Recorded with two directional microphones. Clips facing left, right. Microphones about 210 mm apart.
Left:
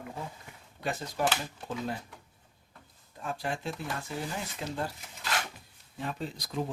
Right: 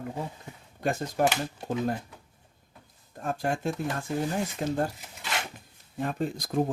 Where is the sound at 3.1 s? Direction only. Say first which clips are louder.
Right 5 dB; 45° right (ahead or behind).